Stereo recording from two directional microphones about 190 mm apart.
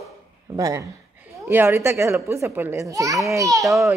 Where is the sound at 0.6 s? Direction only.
20° right (ahead or behind).